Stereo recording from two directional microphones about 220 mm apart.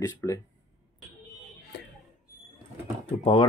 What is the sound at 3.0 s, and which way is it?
Speech, 25° left (ahead or behind).